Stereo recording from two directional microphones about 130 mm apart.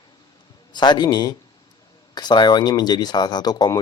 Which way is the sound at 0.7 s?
35° left (ahead or behind).